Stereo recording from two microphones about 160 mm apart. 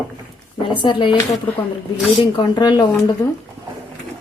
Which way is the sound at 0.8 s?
30° left (ahead or behind).